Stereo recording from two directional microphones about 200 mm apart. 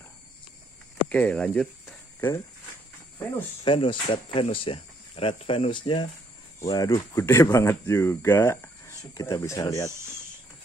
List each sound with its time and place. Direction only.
1.0 s speech: 5° left (ahead or behind)
3.6 s speech: 25° left (ahead or behind)